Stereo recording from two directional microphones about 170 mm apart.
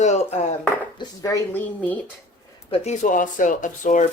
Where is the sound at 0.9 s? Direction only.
20° left (ahead or behind).